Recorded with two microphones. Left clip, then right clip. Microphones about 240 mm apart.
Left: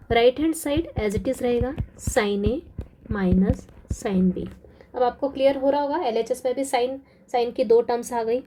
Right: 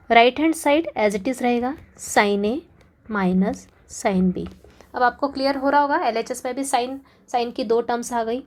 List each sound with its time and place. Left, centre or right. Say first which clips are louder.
0.1 s a woman's voice: right 4 dB; centre
5.4 s a woman's voice: right 1 dB; right
6.2 s a woman's voice: left 2 dB; centre
8.1 s a woman's voice: even; right